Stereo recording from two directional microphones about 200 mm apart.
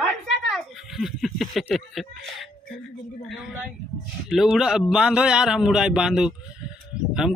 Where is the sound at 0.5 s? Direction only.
Centre (ahead or behind).